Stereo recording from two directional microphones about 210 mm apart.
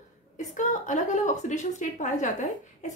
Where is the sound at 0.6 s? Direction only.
35° left (ahead or behind).